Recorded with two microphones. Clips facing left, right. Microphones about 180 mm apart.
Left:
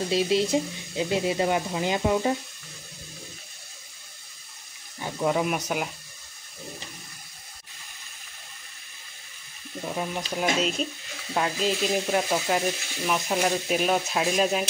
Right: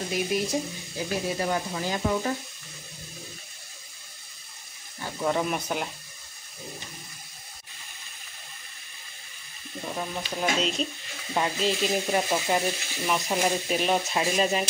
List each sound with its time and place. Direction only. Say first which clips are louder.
0.1 s speech: left 4 dB; 25° left (ahead or behind)
5.0 s speech: left 2 dB; 10° left (ahead or behind)
9.8 s speech: left 2 dB; 10° left (ahead or behind)
11.3 s frying: even; centre (ahead or behind)